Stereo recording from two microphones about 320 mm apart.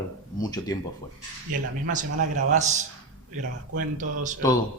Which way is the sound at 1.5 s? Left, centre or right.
Right.